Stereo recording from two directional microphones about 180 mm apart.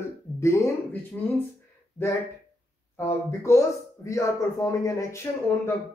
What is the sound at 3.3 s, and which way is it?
Speech, 15° left (ahead or behind).